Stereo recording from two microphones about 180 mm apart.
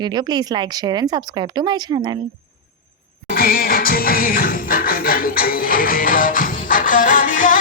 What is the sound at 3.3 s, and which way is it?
Music, 55° left (ahead or behind).